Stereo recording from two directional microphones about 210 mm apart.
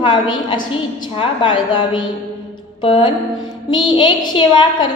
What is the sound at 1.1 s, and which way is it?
A woman's voice, 25° left (ahead or behind).